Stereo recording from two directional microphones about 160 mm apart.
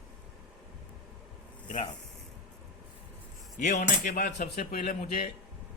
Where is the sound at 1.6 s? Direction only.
50° left (ahead or behind).